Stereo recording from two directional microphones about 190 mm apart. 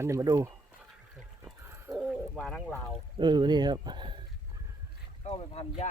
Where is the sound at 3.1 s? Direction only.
25° right (ahead or behind).